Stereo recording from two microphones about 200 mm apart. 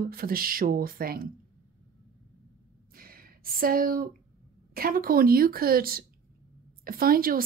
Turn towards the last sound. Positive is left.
turn(degrees=-45)  # may be behind; listen again after turning